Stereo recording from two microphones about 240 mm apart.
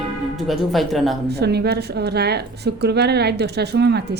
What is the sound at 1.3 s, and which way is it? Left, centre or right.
A woman's voice, right.